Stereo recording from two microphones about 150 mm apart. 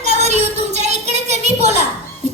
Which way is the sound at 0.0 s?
45° right (ahead or behind).